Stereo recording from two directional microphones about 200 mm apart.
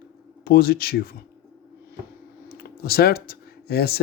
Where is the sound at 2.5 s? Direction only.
50° left (ahead or behind).